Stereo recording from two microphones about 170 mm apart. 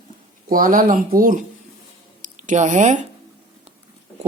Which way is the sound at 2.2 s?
50° right (ahead or behind).